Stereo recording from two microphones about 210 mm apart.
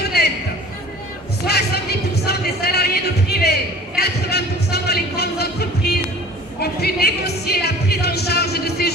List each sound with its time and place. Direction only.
0.2 s music: 50° left (ahead or behind)
1.5 s music: 50° left (ahead or behind)